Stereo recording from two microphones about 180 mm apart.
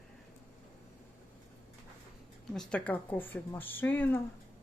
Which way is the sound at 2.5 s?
5° left (ahead or behind).